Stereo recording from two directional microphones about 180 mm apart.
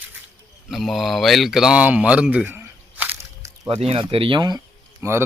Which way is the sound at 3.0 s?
10° right (ahead or behind).